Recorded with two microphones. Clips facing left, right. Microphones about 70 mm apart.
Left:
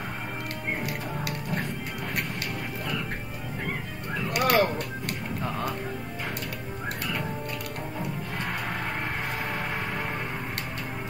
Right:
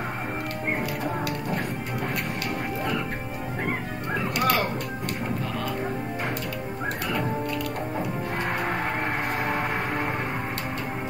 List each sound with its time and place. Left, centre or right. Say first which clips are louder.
4.4 s music: left 2 dB; left